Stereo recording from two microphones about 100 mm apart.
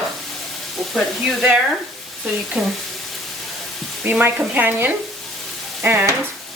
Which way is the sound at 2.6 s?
Centre (ahead or behind).